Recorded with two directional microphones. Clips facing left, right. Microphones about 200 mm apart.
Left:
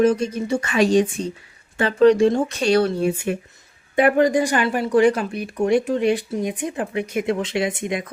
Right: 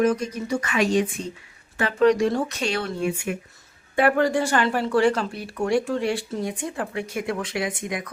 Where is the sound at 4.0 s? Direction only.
20° left (ahead or behind).